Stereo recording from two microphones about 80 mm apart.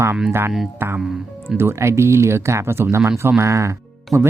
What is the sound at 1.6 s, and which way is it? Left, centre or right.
Speech, right.